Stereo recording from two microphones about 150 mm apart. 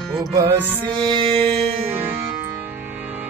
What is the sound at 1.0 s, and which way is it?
Music, 35° right (ahead or behind).